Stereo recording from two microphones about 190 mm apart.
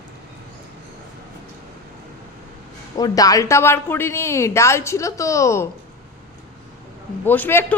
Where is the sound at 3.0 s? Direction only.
20° left (ahead or behind).